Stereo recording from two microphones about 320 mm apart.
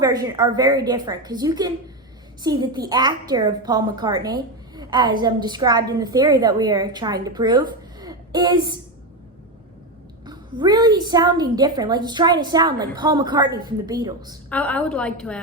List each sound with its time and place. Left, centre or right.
0.0 s a woman's voice: centre
10.2 s a woman's voice: centre
14.5 s a woman's voice: centre